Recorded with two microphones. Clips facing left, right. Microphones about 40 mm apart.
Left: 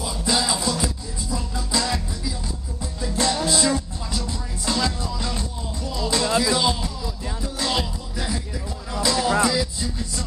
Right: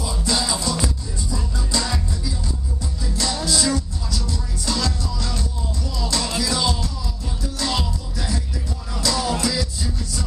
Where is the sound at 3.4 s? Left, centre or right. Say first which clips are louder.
Even; left.